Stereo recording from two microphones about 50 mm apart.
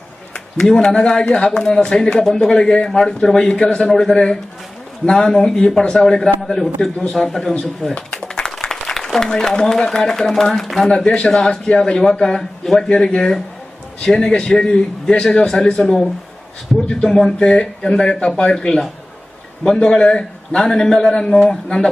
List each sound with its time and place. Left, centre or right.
0.3 s a man's voice: centre
10.8 s speech: left